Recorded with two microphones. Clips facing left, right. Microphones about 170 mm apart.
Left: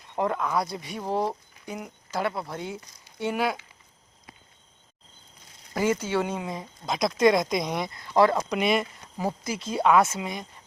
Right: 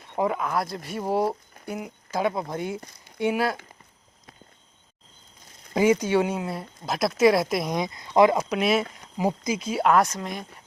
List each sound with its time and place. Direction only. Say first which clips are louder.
0.2 s speech: right 1 dB; 5° right (ahead or behind)
5.7 s speech: right 5 dB; 15° right (ahead or behind)
7.8 s speech: right 3 dB; 15° right (ahead or behind)
8.4 s speech: right 1 dB; 5° right (ahead or behind)
9.1 s speech: right 4 dB; 15° right (ahead or behind); by 10.4 s 5° left (ahead or behind)